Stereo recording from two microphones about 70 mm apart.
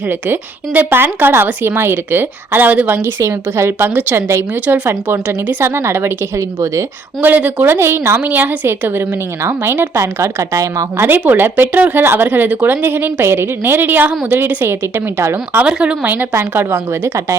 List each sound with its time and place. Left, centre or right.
0.1 s a woman's voice: right
4.6 s a woman's voice: right
7.2 s a woman's voice: right
7.8 s a woman's voice: right
10.0 s a woman's voice: right
10.9 s a woman's voice: right
15.6 s speech: centre
16.3 s a woman's voice: right